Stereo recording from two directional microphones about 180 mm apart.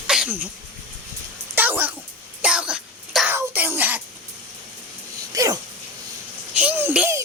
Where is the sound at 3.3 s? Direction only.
10° right (ahead or behind).